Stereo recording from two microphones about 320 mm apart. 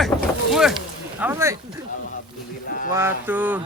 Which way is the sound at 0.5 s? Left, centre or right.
Centre.